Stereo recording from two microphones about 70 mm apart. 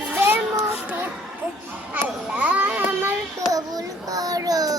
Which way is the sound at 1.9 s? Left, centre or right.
Centre.